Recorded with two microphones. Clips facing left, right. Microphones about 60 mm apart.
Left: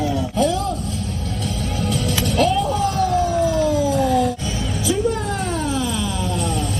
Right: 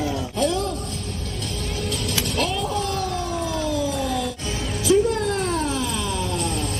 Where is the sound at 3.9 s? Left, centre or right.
Left.